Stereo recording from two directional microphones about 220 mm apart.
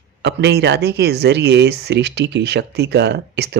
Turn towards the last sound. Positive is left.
turn(degrees=-50)  # may be behind; listen again after turning